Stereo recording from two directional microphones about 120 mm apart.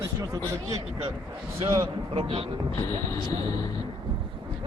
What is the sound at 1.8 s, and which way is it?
Speech, 45° right (ahead or behind).